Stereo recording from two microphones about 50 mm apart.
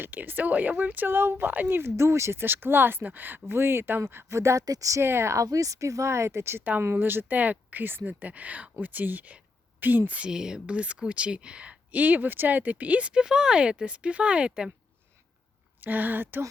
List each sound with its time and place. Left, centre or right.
0.1 s speech: right
3.4 s speech: right
4.3 s speech: right
5.0 s speech: right
5.3 s speech: right
6.9 s speech: right
10.2 s speech: centre
10.7 s speech: right
15.8 s speech: right